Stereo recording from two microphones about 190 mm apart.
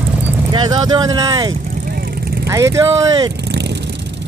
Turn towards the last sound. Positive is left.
turn(degrees=-15)  # may be behind; listen again after turning